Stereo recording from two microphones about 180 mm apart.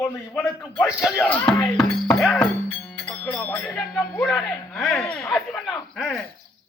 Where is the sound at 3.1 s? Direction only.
5° left (ahead or behind).